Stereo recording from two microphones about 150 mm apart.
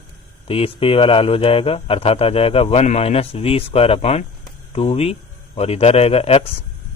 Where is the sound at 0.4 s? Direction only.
40° left (ahead or behind).